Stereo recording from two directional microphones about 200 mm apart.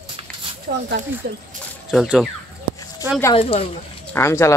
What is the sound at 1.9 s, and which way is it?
Speech, centre (ahead or behind).